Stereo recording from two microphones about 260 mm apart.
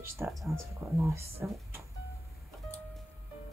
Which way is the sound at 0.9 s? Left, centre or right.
Centre.